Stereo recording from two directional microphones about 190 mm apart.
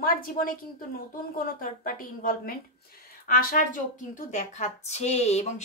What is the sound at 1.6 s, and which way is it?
A woman's voice, 45° left (ahead or behind).